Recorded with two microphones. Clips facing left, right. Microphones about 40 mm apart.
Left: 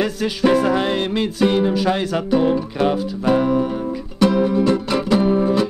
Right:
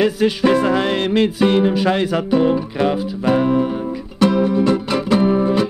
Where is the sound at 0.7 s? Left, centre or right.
Right.